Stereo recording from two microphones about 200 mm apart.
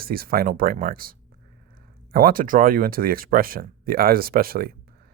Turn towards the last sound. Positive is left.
turn(degrees=-45)  # may be behind; listen again after turning